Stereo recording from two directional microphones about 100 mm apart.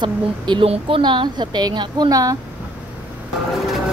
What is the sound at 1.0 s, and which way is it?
A woman's voice, 50° right (ahead or behind).